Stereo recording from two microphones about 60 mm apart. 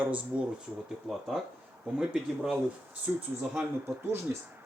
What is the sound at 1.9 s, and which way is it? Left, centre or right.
Speech, centre.